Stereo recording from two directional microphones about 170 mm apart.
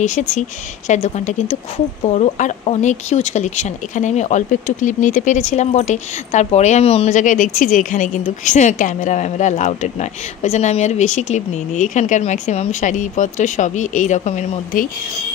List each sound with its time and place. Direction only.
0.0 s speech: 45° left (ahead or behind)